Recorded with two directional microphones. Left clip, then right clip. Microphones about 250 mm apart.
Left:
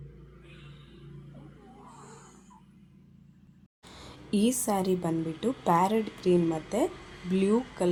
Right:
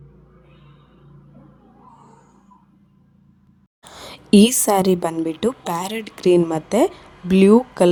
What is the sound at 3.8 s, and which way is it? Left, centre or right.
A woman's voice, right.